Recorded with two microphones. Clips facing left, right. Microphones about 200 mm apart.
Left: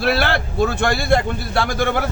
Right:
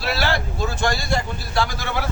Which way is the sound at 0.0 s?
55° left (ahead or behind).